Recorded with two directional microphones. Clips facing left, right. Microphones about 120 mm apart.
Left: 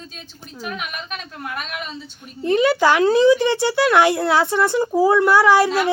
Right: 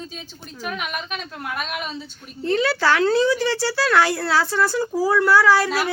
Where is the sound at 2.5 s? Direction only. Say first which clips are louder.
Left 4 dB; 15° left (ahead or behind).